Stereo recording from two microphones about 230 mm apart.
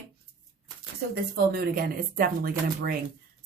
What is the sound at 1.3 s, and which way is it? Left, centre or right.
Speech, right.